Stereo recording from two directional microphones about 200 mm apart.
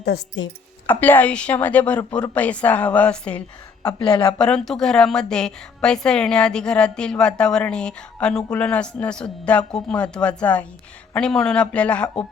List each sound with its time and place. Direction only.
0.0 s speech: 55° left (ahead or behind)
0.9 s a woman's voice: 10° left (ahead or behind)
3.8 s speech: 20° left (ahead or behind)
4.4 s a woman's voice: 5° left (ahead or behind)